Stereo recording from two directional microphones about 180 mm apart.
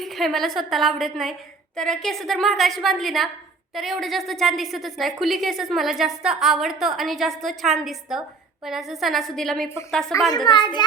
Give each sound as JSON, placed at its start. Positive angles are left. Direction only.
{"t": 0.0, "sound": "a woman's voice", "side_deg": 0}
{"t": 10.1, "sound": "a child's voice", "side_deg": 20}